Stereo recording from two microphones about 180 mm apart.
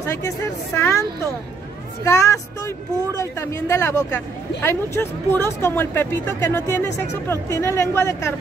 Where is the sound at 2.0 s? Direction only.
15° left (ahead or behind).